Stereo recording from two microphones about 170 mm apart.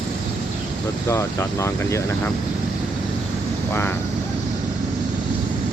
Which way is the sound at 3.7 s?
15° left (ahead or behind).